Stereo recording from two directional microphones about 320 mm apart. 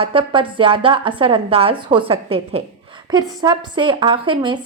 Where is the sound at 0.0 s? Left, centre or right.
Centre.